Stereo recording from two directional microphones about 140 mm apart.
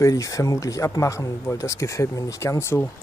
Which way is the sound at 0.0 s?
25° left (ahead or behind).